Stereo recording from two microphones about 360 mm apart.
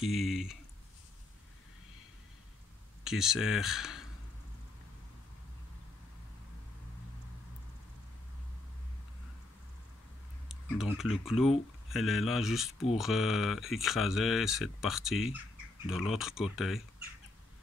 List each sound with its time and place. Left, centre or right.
0.0 s speech: centre
3.0 s speech: centre
10.5 s speech: centre